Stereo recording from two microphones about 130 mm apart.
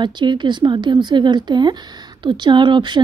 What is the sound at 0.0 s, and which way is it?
Speech, 35° right (ahead or behind).